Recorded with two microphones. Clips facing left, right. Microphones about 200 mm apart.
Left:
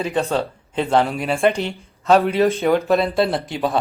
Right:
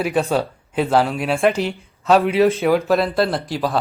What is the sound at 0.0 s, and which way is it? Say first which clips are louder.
Speech: right 2 dB; 10° right (ahead or behind).